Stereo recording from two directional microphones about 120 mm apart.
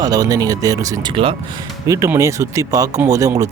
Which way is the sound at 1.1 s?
50° right (ahead or behind).